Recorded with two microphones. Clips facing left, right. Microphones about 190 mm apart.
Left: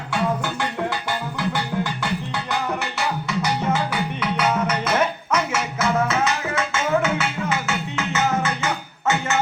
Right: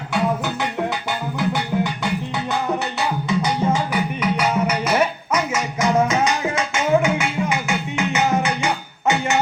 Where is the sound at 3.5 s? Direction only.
15° right (ahead or behind).